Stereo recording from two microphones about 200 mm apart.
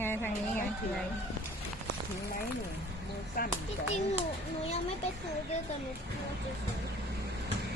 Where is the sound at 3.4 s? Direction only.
45° left (ahead or behind).